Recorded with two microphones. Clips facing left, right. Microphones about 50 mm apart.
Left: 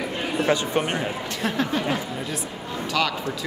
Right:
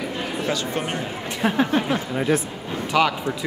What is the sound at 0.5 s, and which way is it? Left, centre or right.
Speech, left.